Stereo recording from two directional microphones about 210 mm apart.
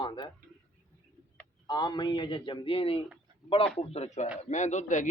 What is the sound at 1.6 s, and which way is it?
A man's voice, 20° left (ahead or behind).